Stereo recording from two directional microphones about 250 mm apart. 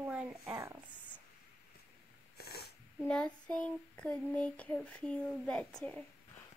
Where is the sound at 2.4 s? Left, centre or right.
Left.